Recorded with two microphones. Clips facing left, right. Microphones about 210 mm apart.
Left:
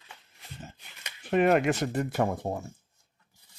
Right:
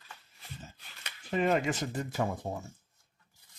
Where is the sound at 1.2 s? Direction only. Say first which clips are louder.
Left 6 dB; 65° left (ahead or behind).